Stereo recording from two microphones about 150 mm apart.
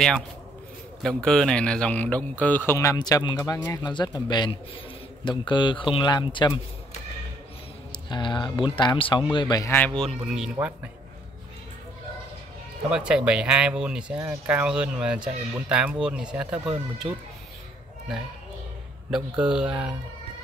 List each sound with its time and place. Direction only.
1.0 s speech: 5° left (ahead or behind); by 6.6 s 25° left (ahead or behind)
7.9 s speech: 30° left (ahead or behind)
9.8 s speech: 5° left (ahead or behind)
12.9 s speech: 5° right (ahead or behind)
19.0 s speech: 5° right (ahead or behind)